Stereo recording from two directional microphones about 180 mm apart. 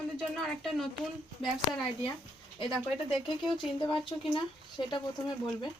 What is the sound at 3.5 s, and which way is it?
Speech, 25° left (ahead or behind).